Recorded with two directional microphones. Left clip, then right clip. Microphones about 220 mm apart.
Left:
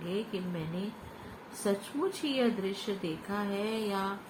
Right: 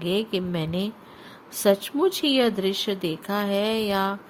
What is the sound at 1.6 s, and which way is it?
Speech, 50° right (ahead or behind).